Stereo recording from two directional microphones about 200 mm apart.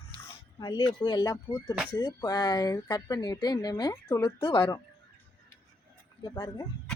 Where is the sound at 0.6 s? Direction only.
20° left (ahead or behind).